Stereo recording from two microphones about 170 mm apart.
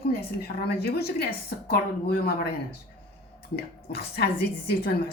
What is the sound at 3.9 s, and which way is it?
Speech, 70° left (ahead or behind).